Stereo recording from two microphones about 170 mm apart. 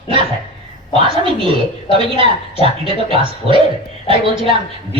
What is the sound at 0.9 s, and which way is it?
A woman's voice, 30° right (ahead or behind).